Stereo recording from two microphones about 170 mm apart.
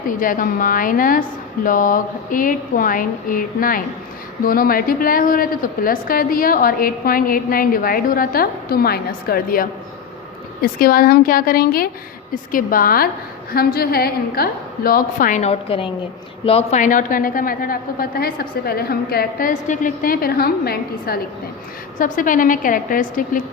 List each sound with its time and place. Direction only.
0.1 s a woman's voice: 55° left (ahead or behind); by 16.8 s 35° left (ahead or behind)
16.8 s a woman's voice: 50° left (ahead or behind)
21.9 s a woman's voice: 55° left (ahead or behind)